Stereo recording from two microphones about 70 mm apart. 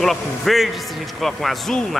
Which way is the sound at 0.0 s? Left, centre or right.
Centre.